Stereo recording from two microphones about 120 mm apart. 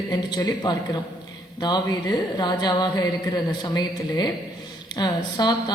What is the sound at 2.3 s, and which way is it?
A woman's voice, 35° left (ahead or behind).